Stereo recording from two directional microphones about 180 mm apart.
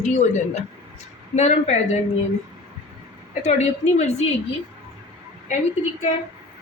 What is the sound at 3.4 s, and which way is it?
Speech, 40° left (ahead or behind).